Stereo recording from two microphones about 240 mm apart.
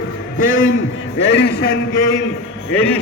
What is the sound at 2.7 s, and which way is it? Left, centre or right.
Speech, centre.